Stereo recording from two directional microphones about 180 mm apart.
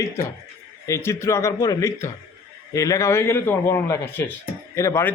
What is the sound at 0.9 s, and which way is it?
A man's voice, 15° left (ahead or behind).